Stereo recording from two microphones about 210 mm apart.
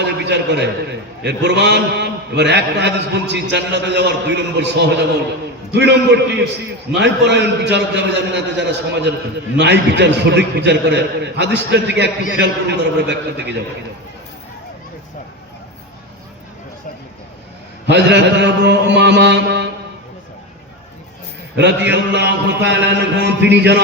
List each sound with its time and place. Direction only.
0.0 s a sound: 55° right (ahead or behind)
1.2 s a man's voice: 55° right (ahead or behind)
17.8 s a man's voice: 55° right (ahead or behind)
21.5 s a man's voice: 55° right (ahead or behind)